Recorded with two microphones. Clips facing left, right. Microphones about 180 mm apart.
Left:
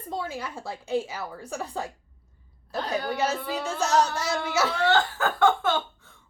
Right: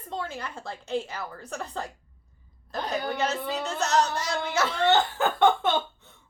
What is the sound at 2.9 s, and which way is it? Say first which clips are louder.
Speech: left 1 dB; 10° left (ahead or behind).